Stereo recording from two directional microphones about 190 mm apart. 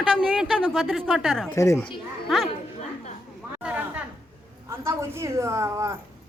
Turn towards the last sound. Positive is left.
turn(degrees=-15)  # may be behind; listen again after turning